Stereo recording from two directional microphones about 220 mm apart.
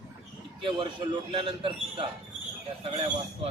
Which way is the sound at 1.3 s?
25° right (ahead or behind).